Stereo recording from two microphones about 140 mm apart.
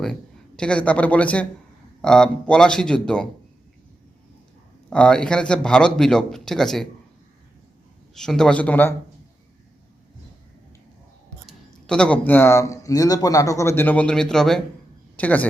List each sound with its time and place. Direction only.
0.0 s a man's voice: 5° left (ahead or behind)
4.9 s a man's voice: 5° left (ahead or behind)
8.1 s speech: 5° left (ahead or behind)
11.4 s speech: 5° left (ahead or behind)